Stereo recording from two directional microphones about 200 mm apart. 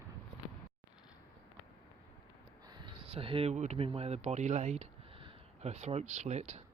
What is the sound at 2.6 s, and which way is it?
Speech, 25° right (ahead or behind).